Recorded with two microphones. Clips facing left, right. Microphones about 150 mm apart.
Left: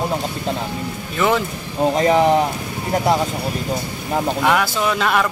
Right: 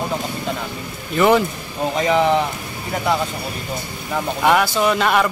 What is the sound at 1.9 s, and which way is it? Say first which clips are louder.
Speech: left 2 dB; 35° left (ahead or behind).